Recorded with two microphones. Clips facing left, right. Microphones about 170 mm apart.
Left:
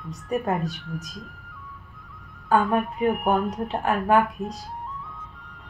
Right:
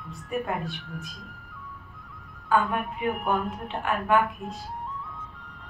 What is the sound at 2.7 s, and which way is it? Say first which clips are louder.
A woman's voice: left 6 dB; 40° left (ahead or behind).